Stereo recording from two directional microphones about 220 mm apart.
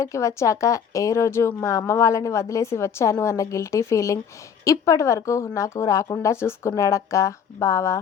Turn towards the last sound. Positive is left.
turn(degrees=15)  # may be behind; listen again after turning